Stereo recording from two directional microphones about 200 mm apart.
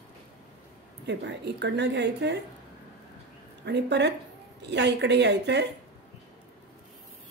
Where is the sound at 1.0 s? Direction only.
60° right (ahead or behind).